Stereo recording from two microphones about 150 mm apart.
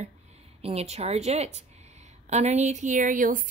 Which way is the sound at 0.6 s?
45° right (ahead or behind).